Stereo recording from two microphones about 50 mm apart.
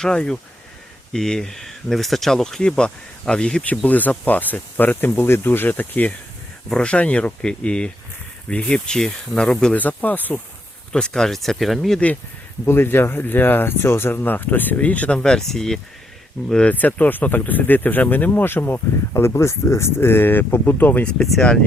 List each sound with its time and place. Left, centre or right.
0.0 s speech: centre
3.8 s speech: left
6.7 s speech: centre
9.0 s speech: centre
9.7 s speech: left
10.9 s speech: centre
12.6 s speech: left
15.2 s speech: centre
16.5 s speech: centre
16.7 s speech: left
19.2 s speech: left
21.2 s speech: centre